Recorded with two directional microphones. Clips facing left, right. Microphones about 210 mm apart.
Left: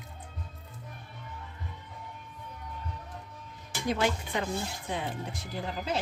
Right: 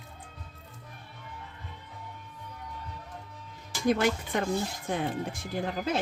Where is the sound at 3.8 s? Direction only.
50° right (ahead or behind).